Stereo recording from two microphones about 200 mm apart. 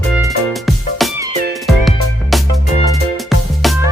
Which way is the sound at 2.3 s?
Centre (ahead or behind).